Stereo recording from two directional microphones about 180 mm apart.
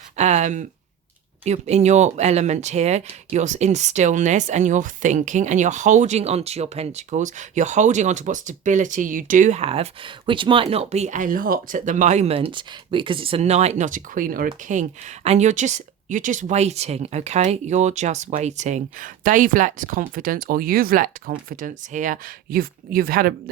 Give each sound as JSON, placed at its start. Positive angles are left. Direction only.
{"t": 0.2, "sound": "speech", "side_deg": -40}